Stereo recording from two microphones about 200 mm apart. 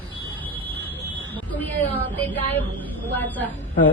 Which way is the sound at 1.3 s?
10° left (ahead or behind).